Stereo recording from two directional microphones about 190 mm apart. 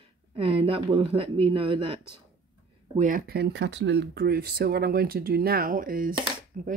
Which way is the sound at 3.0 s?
45° right (ahead or behind).